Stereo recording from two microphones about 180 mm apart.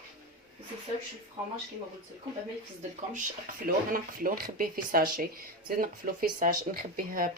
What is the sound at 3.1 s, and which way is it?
Speech, 50° right (ahead or behind).